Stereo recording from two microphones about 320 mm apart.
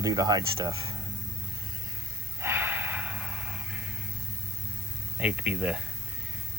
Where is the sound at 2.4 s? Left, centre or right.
Centre.